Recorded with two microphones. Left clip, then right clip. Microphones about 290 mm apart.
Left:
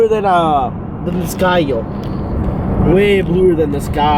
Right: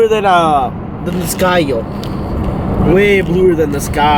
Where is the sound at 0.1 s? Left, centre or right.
Left.